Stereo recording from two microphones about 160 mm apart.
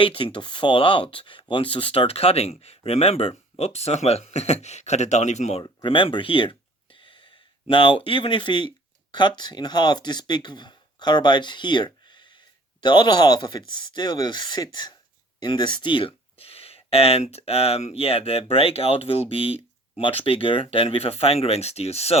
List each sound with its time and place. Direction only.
0.0 s speech: 35° left (ahead or behind)
5.6 s a sound: 30° left (ahead or behind)
7.7 s speech: 30° left (ahead or behind)